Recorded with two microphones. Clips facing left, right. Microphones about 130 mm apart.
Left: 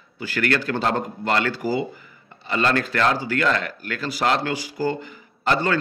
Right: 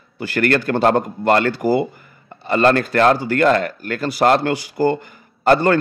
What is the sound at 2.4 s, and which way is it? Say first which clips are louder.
A man's voice: right 7 dB; 50° right (ahead or behind).